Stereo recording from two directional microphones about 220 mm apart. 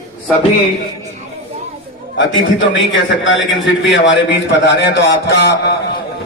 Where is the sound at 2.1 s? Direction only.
55° left (ahead or behind).